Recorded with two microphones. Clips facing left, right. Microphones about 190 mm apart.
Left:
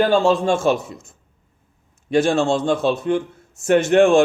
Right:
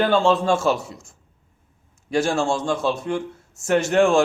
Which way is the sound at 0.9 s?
55° left (ahead or behind).